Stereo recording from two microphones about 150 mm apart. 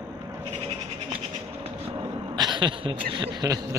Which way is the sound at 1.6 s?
35° right (ahead or behind).